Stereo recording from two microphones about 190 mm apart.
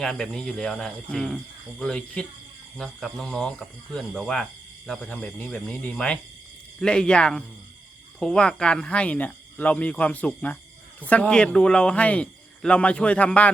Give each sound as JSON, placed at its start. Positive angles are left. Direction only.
{"t": 0.0, "sound": "speech", "side_deg": 5}